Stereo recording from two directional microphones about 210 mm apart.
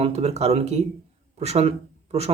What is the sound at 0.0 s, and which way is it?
Speech, 30° right (ahead or behind).